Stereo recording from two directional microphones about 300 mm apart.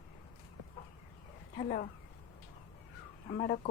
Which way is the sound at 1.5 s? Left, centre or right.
Left.